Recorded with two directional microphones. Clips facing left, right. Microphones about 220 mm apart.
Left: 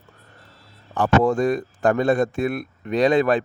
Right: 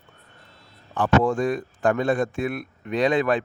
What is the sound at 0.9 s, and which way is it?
A man's voice, 40° left (ahead or behind).